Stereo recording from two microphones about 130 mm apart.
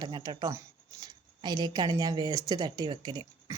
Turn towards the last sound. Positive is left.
turn(degrees=-35)  # may be behind; listen again after turning